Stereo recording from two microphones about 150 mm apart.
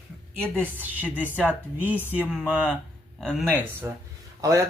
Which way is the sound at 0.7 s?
10° right (ahead or behind).